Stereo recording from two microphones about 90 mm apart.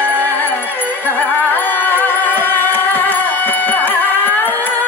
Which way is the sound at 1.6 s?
20° left (ahead or behind).